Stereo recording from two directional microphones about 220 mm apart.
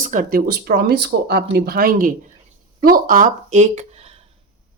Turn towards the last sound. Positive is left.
turn(degrees=-35)  # may be behind; listen again after turning